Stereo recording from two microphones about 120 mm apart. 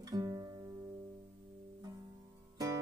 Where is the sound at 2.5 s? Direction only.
30° right (ahead or behind).